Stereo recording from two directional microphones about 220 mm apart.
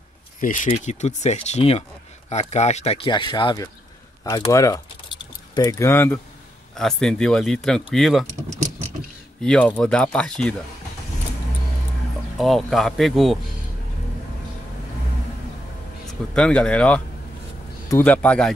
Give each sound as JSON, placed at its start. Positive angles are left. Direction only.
{"t": 0.4, "sound": "speech", "side_deg": 35}
{"t": 4.2, "sound": "keys jangling", "side_deg": 15}
{"t": 6.8, "sound": "speech", "side_deg": 0}
{"t": 9.4, "sound": "speech", "side_deg": 5}
{"t": 12.4, "sound": "speech", "side_deg": 0}
{"t": 16.1, "sound": "a man's voice", "side_deg": 5}